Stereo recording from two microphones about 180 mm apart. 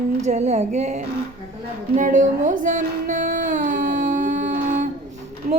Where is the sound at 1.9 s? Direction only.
45° right (ahead or behind).